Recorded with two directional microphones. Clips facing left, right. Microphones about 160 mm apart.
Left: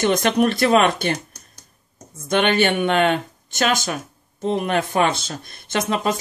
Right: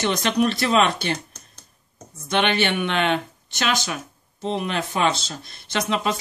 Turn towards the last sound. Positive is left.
turn(degrees=45)  # may be behind; listen again after turning